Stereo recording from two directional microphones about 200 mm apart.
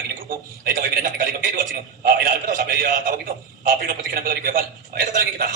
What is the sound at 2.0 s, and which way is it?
A man's voice, 45° right (ahead or behind).